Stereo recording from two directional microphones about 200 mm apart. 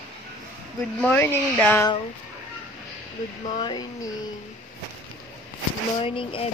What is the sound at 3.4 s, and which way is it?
Speech, 20° left (ahead or behind).